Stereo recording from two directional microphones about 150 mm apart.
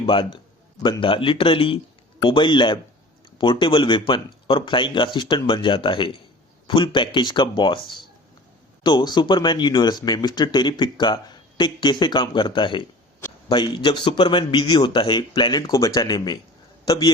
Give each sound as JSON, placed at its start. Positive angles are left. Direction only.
{"t": 0.0, "sound": "a man's voice", "side_deg": 35}